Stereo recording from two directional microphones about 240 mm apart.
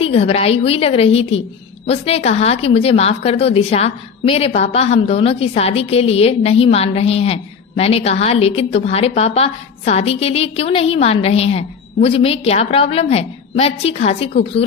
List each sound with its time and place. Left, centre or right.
0.0 s a woman's voice: left